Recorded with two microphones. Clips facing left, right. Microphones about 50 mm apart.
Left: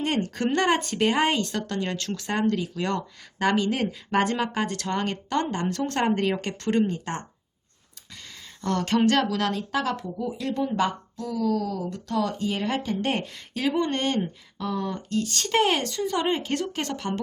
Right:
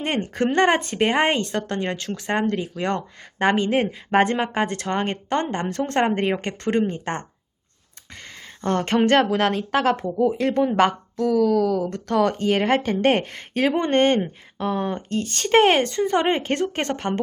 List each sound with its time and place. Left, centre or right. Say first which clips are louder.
0.3 s speech: right 6 dB; right
6.9 s speech: right 3 dB; right